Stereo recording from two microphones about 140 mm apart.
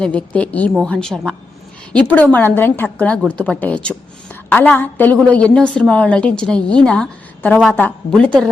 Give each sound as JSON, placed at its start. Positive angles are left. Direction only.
{"t": 0.0, "sound": "a woman's voice", "side_deg": 10}